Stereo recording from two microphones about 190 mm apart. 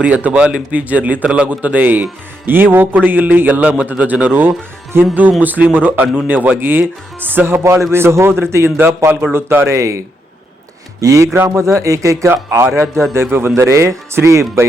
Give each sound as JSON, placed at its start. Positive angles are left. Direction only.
{"t": 0.0, "sound": "speech", "side_deg": -5}
{"t": 11.0, "sound": "speech", "side_deg": -15}